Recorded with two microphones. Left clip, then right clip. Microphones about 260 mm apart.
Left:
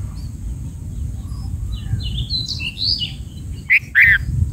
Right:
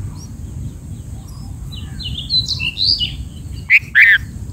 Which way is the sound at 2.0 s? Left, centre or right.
Right.